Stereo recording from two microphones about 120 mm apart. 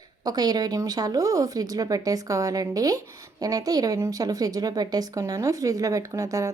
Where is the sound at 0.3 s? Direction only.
35° right (ahead or behind).